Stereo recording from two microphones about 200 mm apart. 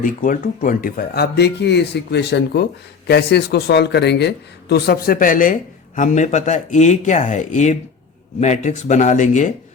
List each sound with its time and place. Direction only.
0.0 s speech: 40° left (ahead or behind)